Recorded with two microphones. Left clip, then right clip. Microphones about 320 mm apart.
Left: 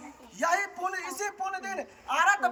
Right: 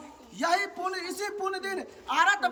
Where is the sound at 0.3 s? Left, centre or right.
Centre.